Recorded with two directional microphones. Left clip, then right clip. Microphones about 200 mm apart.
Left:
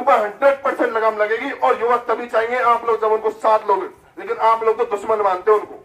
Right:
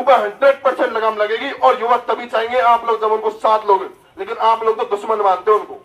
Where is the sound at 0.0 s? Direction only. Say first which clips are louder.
Right 3 dB; 40° right (ahead or behind).